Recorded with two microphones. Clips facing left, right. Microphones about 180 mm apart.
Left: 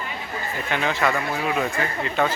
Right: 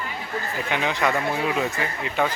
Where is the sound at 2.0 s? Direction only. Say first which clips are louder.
Even; 10° right (ahead or behind).